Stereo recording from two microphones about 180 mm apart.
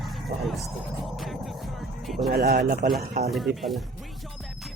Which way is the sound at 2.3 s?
60° right (ahead or behind).